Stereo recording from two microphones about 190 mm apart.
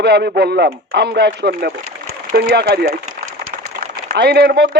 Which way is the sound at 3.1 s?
50° right (ahead or behind).